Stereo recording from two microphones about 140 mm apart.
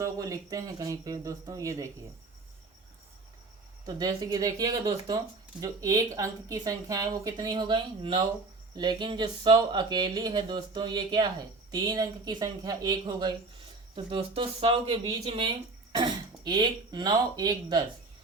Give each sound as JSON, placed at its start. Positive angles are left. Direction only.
{"t": 0.0, "sound": "speech", "side_deg": -25}
{"t": 3.8, "sound": "speech", "side_deg": -30}